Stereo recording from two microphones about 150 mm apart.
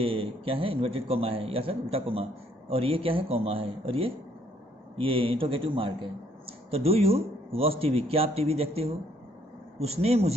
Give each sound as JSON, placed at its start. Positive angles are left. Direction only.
{"t": 0.0, "sound": "a man's voice", "side_deg": -40}